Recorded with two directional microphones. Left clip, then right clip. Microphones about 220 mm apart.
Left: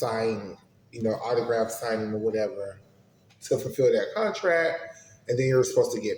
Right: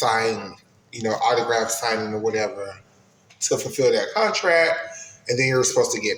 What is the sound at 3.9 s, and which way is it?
A man's voice, 15° left (ahead or behind).